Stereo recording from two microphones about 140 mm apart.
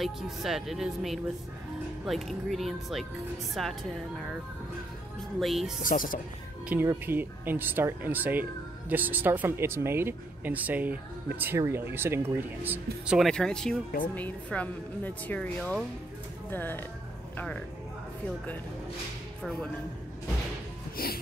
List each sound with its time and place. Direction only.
0.0 s speech: centre (ahead or behind)
5.4 s speech: centre (ahead or behind)
5.8 s speech: 75° left (ahead or behind)
6.9 s speech: 15° right (ahead or behind)
13.3 s speech: 5° left (ahead or behind)
21.0 s music: 90° left